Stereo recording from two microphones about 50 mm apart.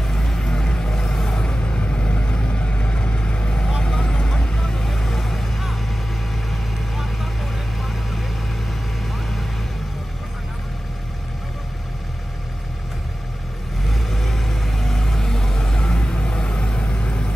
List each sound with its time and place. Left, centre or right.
0.0 s vehicle: centre
13.8 s vehicle: centre; by 17.3 s left